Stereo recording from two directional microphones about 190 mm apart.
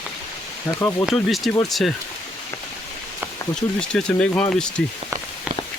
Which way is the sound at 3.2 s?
5° left (ahead or behind).